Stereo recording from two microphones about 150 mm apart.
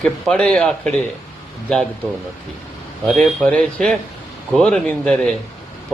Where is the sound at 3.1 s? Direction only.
5° left (ahead or behind).